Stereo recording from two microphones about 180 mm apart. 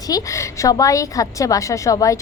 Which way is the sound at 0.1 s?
20° left (ahead or behind).